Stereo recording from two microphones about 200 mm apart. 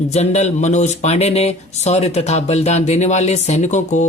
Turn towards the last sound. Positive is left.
turn(degrees=35)  # may be behind; listen again after turning